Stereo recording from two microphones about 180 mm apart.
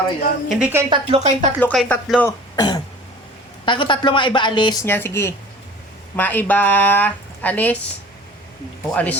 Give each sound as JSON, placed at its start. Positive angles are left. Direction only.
{"t": 0.4, "sound": "a woman's voice", "side_deg": -5}
{"t": 0.9, "sound": "a woman's voice", "side_deg": -35}
{"t": 1.5, "sound": "a woman's voice", "side_deg": 5}
{"t": 2.6, "sound": "speech", "side_deg": 20}
{"t": 4.9, "sound": "a woman's voice", "side_deg": 15}
{"t": 8.9, "sound": "a woman's voice", "side_deg": 10}